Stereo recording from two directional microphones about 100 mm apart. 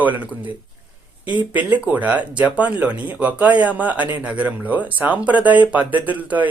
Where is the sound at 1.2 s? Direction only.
15° right (ahead or behind).